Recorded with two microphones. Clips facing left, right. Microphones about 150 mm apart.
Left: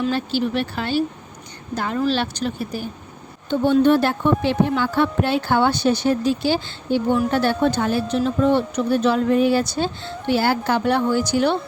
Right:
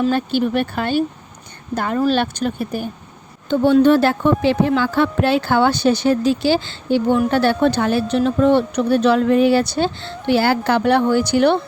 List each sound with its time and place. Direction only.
0.0 s a woman's voice: 55° right (ahead or behind)
3.5 s speech: 90° right
7.3 s speech: 80° right